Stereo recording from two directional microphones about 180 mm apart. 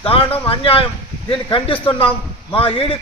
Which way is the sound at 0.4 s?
30° left (ahead or behind).